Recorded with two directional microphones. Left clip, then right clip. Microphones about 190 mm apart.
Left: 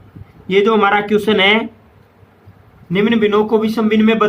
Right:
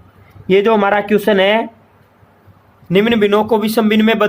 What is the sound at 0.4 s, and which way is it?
Speech, 40° right (ahead or behind).